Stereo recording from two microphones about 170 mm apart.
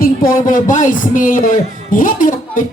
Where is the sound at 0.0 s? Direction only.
55° left (ahead or behind).